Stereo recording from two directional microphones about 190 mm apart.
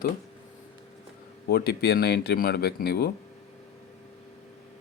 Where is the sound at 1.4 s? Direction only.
55° left (ahead or behind).